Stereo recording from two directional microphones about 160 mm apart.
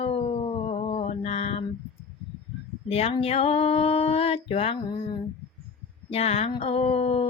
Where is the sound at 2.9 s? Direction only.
40° left (ahead or behind).